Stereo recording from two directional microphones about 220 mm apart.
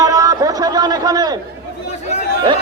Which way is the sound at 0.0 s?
15° right (ahead or behind).